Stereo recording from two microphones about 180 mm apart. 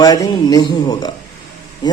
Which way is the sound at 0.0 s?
20° left (ahead or behind).